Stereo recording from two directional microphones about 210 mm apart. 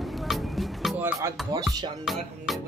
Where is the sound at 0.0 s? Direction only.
Centre (ahead or behind).